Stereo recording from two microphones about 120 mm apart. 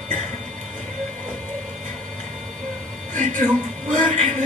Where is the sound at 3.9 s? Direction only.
90° right.